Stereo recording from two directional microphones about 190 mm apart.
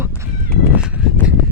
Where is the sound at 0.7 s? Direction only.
5° right (ahead or behind).